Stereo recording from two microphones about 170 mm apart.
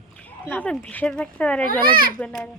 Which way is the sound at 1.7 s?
60° right (ahead or behind).